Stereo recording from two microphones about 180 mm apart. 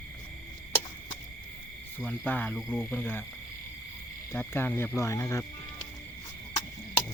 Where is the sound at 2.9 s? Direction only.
10° left (ahead or behind).